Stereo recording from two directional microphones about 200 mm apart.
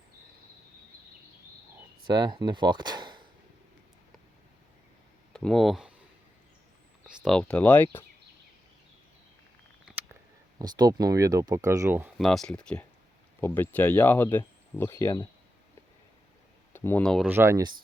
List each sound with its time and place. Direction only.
2.0 s speech: 20° right (ahead or behind)
5.3 s speech: 5° left (ahead or behind)
7.1 s speech: centre (ahead or behind)
9.8 s a sound: 10° right (ahead or behind)
10.6 s speech: 20° right (ahead or behind)
12.1 s speech: centre (ahead or behind)
16.7 s speech: 10° left (ahead or behind)
17.2 s speech: 10° right (ahead or behind)